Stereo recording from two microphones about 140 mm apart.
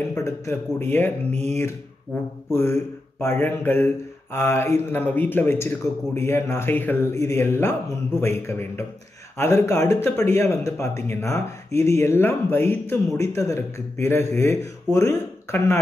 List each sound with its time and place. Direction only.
0.1 s speech: 20° left (ahead or behind)
1.3 s speech: 50° right (ahead or behind)
2.5 s speech: 20° left (ahead or behind)